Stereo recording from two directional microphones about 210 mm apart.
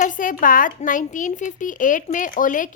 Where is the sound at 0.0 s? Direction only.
40° left (ahead or behind).